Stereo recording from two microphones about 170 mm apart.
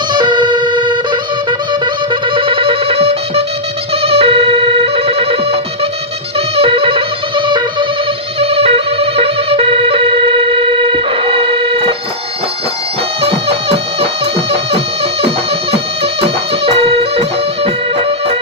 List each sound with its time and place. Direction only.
0.1 s music: 25° right (ahead or behind)
2.3 s music: 30° right (ahead or behind)
4.0 s siren: 35° right (ahead or behind)
6.5 s music: 35° right (ahead or behind)
13.2 s music: 35° right (ahead or behind)
15.2 s music: 35° right (ahead or behind)